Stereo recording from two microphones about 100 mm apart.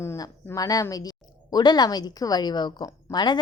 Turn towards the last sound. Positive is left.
turn(degrees=45)  # may be behind; listen again after turning